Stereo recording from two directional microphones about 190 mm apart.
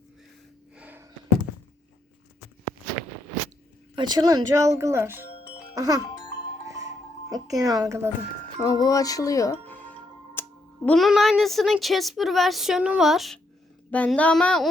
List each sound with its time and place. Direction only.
0.8 s a sound: 10° right (ahead or behind)
3.9 s speech: 20° right (ahead or behind)
6.7 s music: 20° right (ahead or behind)
8.6 s tick-tock: 20° left (ahead or behind)
10.8 s speech: centre (ahead or behind)